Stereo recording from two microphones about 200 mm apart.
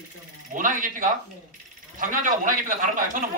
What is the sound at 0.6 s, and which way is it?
A man's voice, 45° right (ahead or behind).